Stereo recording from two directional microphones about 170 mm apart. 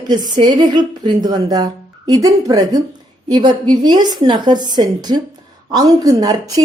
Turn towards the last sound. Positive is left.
turn(degrees=-20)  # may be behind; listen again after turning